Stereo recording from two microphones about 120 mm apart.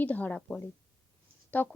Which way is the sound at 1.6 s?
15° left (ahead or behind).